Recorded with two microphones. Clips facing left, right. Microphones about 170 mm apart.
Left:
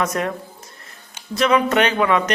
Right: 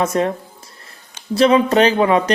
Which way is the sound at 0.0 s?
30° right (ahead or behind).